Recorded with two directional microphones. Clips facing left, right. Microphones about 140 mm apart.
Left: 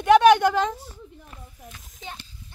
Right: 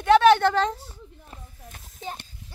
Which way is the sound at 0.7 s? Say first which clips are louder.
Even; 30° right (ahead or behind).